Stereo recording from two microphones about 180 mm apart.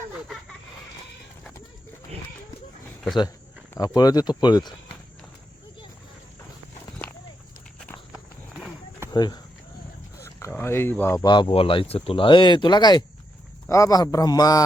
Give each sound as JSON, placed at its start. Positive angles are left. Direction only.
{"t": 3.8, "sound": "speech", "side_deg": 20}
{"t": 8.1, "sound": "walk", "side_deg": 0}
{"t": 9.1, "sound": "speech", "side_deg": 25}